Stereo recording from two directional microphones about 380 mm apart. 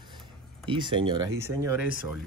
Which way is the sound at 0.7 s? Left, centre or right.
Centre.